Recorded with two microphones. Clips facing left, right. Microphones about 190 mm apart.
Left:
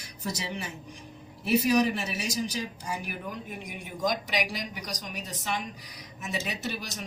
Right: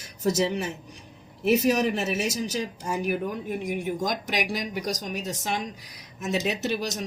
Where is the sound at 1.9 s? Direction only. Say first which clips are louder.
Right 5 dB; 45° right (ahead or behind).